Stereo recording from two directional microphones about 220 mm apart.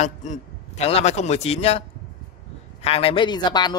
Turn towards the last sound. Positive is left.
turn(degrees=20)  # may be behind; listen again after turning